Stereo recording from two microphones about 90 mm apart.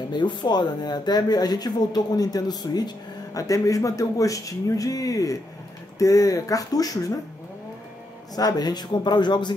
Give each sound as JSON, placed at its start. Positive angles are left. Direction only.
{"t": 0.1, "sound": "a man's voice", "side_deg": 60}
{"t": 8.4, "sound": "speech", "side_deg": 45}